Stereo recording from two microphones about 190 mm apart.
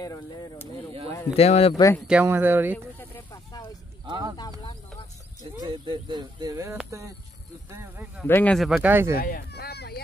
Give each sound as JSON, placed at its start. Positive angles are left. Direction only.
{"t": 0.0, "sound": "speech", "side_deg": 20}
{"t": 1.3, "sound": "speech", "side_deg": 35}
{"t": 2.0, "sound": "speech", "side_deg": -10}
{"t": 4.0, "sound": "speech", "side_deg": -20}
{"t": 5.6, "sound": "speech", "side_deg": -25}
{"t": 8.2, "sound": "speech", "side_deg": 10}
{"t": 8.6, "sound": "speech", "side_deg": -5}
{"t": 9.1, "sound": "a sound", "side_deg": 50}